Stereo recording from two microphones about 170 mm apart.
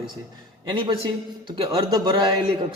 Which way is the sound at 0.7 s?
30° right (ahead or behind).